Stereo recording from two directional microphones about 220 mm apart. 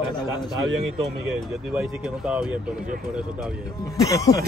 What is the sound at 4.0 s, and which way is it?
Speech, 15° left (ahead or behind).